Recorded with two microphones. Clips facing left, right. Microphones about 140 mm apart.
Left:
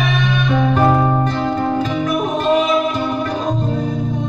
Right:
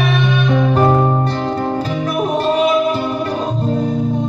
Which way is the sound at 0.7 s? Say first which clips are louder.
Even; 30° right (ahead or behind).